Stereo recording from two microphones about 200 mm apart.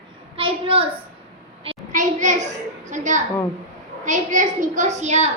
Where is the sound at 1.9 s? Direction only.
40° right (ahead or behind).